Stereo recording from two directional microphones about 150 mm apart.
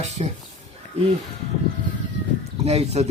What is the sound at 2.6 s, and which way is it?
Speech, 45° right (ahead or behind).